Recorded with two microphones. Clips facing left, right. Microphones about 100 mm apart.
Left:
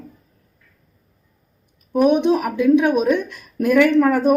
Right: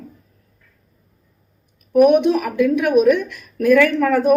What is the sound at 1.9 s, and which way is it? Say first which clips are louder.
Speech: right 3 dB; 25° left (ahead or behind).